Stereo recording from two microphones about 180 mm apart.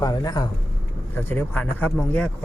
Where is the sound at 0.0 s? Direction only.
20° left (ahead or behind).